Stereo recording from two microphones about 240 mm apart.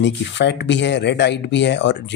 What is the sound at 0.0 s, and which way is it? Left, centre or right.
Speech, left.